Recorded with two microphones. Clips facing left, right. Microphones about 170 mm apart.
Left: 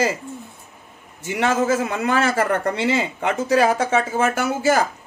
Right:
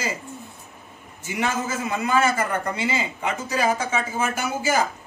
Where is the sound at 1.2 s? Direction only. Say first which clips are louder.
Left 7 dB; 70° left (ahead or behind).